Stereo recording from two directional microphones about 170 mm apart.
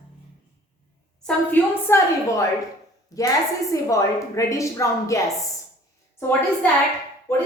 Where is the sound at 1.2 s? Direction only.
15° left (ahead or behind).